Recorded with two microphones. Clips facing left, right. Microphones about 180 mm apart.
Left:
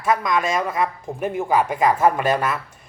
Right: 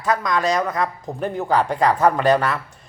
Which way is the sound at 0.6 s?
10° left (ahead or behind).